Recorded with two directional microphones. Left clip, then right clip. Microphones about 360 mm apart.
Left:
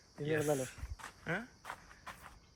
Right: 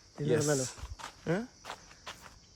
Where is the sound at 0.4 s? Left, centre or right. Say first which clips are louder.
Right 4 dB; right.